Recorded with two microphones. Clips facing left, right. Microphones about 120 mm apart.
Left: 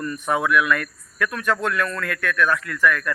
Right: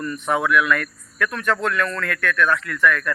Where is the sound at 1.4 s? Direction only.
10° left (ahead or behind).